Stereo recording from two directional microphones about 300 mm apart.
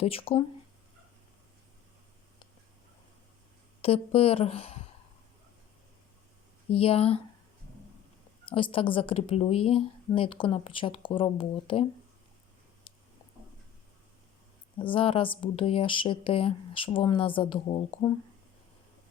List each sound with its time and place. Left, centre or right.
0.0 s speech: centre
3.8 s a woman's voice: centre
6.7 s speech: centre
8.4 s speech: centre
14.8 s speech: centre